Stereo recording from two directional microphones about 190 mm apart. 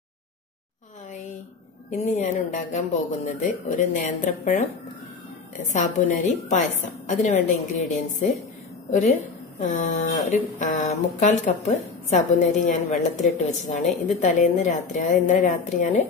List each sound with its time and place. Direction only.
1.9 s speech: 40° left (ahead or behind)